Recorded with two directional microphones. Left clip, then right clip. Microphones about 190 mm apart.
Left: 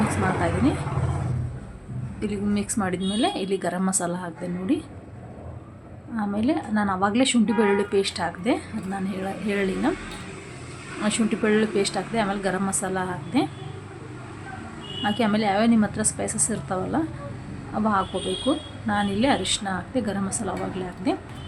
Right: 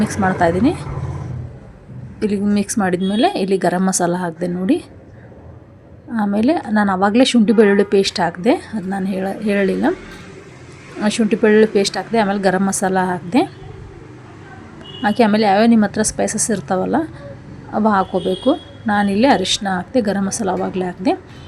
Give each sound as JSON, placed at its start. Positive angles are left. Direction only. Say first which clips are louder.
{"t": 0.1, "sound": "a woman's voice", "louder": "right 8 dB", "side_deg": -35}
{"t": 2.2, "sound": "a woman's voice", "louder": "right 9 dB", "side_deg": -35}
{"t": 6.1, "sound": "a woman's voice", "louder": "right 8 dB", "side_deg": -35}
{"t": 11.0, "sound": "a woman's voice", "louder": "right 9 dB", "side_deg": -30}
{"t": 15.0, "sound": "a woman's voice", "louder": "right 9 dB", "side_deg": -35}